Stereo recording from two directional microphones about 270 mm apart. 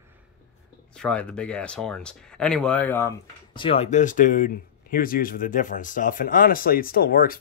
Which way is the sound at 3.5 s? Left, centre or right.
Left.